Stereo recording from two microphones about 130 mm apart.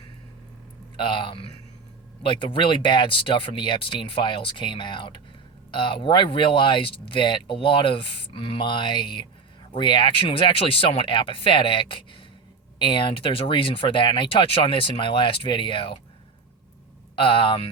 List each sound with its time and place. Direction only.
0.9 s speech: 40° left (ahead or behind)
17.2 s speech: 45° left (ahead or behind)